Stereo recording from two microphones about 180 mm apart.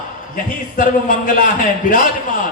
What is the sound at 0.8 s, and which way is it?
Speech, 50° left (ahead or behind).